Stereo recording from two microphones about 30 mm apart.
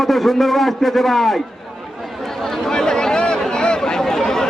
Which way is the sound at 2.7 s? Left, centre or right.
Left.